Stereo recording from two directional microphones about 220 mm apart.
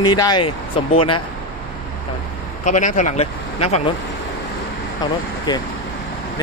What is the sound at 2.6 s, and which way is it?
Speech, 35° left (ahead or behind).